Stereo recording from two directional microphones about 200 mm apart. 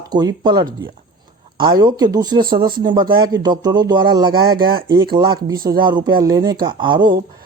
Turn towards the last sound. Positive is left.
turn(degrees=-25)  # may be behind; listen again after turning